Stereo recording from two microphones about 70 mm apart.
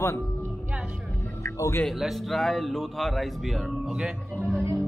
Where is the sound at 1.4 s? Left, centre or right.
Left.